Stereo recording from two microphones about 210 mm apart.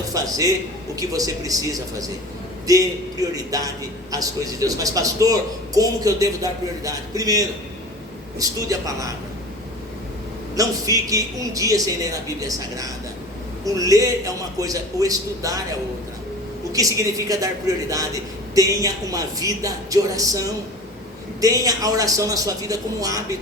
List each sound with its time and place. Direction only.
0.1 s a man's voice: 15° right (ahead or behind)
10.5 s a man's voice: 15° right (ahead or behind)
16.7 s a man's voice: 15° right (ahead or behind)